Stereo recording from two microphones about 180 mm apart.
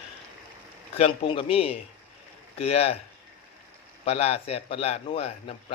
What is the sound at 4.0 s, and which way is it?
A man's voice, 35° left (ahead or behind).